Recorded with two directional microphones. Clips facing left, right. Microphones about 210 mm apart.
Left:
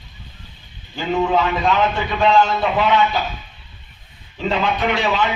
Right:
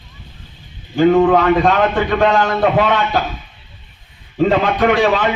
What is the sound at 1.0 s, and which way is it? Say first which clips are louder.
A man's voice: right 8 dB; 55° right (ahead or behind).